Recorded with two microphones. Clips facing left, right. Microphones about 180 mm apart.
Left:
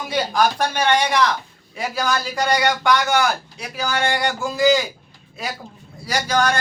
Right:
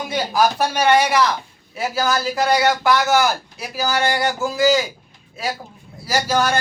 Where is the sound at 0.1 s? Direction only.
5° right (ahead or behind).